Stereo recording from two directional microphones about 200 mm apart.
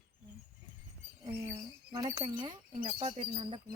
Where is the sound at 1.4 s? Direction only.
20° right (ahead or behind).